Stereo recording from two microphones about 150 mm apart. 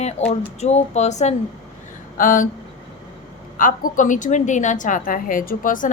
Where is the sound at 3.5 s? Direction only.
65° left (ahead or behind).